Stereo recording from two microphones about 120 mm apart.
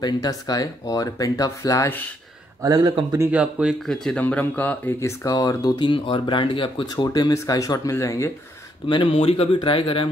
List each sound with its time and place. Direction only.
0.0 s speech: 30° left (ahead or behind)
2.6 s speech: 35° right (ahead or behind)
3.3 s speech: 10° right (ahead or behind)
3.8 s speech: 5° left (ahead or behind)
5.2 s speech: 30° left (ahead or behind); by 7.1 s 45° left (ahead or behind)
7.1 s speech: 30° left (ahead or behind)
8.8 s speech: 45° left (ahead or behind)